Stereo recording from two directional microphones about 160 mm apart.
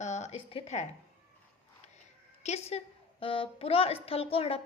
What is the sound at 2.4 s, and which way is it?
A woman's voice, 40° left (ahead or behind).